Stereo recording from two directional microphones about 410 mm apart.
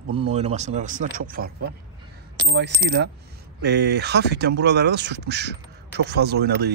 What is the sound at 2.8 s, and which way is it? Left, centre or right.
Speech, right.